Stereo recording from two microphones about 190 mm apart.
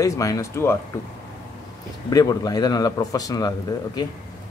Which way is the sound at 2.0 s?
20° left (ahead or behind).